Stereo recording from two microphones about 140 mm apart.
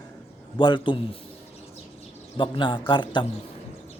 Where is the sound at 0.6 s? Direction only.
35° left (ahead or behind).